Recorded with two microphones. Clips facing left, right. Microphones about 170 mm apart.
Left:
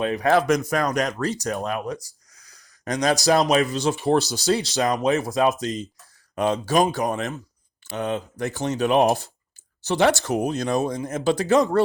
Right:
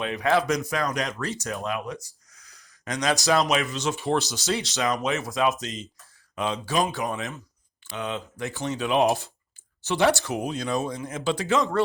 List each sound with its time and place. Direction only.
0.0 s speech: 40° left (ahead or behind)